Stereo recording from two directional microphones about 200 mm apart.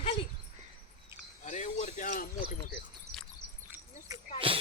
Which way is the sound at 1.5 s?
35° left (ahead or behind).